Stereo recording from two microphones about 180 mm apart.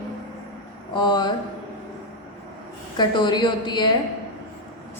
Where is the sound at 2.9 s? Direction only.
25° left (ahead or behind).